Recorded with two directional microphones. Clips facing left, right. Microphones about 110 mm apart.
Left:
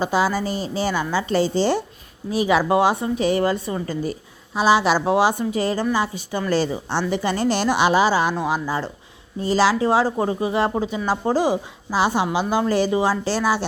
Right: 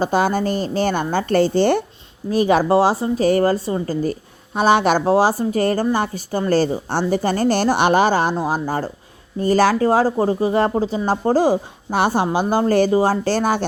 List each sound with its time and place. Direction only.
0.0 s speech: 50° right (ahead or behind)